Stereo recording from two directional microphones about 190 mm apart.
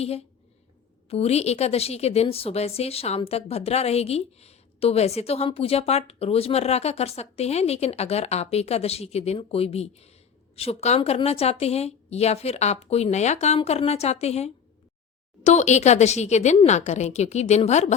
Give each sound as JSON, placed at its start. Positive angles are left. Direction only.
{"t": 1.1, "sound": "a woman's voice", "side_deg": 35}